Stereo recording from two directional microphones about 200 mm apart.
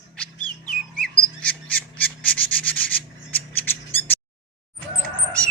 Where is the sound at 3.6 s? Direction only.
10° left (ahead or behind).